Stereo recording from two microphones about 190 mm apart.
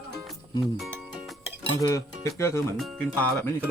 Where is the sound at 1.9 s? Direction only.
15° left (ahead or behind).